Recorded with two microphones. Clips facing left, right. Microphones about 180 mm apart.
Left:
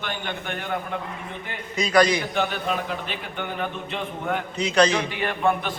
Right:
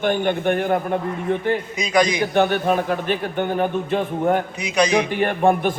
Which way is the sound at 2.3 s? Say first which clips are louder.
Right 8 dB; 55° right (ahead or behind).